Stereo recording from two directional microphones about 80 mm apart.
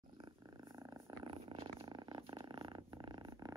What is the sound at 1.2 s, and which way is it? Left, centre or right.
Purr, right.